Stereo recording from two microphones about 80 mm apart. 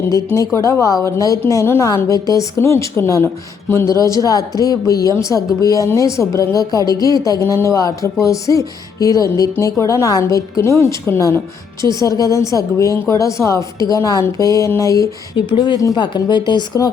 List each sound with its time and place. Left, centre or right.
0.3 s speech: left
2.6 s speech: left
4.2 s speech: left
15.4 s speech: left